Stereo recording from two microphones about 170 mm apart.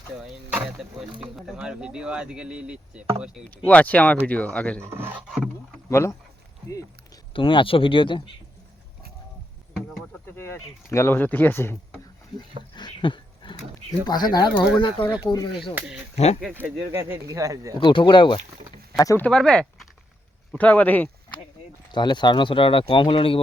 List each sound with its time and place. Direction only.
0.2 s speech: 5° right (ahead or behind)
3.5 s speech: 10° left (ahead or behind)
4.8 s speech: 15° right (ahead or behind)
5.9 s speech: 15° left (ahead or behind)
7.3 s speech: 30° left (ahead or behind)
10.2 s speech: 15° left (ahead or behind)
12.7 s a sound: 25° left (ahead or behind)
14.1 s speech: 25° left (ahead or behind)
16.1 s speech: 40° left (ahead or behind)
16.6 s speech: 10° right (ahead or behind)
17.7 s speech: 30° left (ahead or behind)
19.2 s speech: 5° left (ahead or behind)
21.9 s speech: 25° left (ahead or behind)